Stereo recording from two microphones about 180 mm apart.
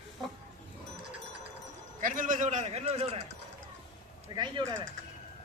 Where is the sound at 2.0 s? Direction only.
50° right (ahead or behind).